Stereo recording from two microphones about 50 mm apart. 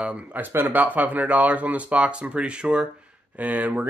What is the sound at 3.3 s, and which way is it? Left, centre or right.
Speech, right.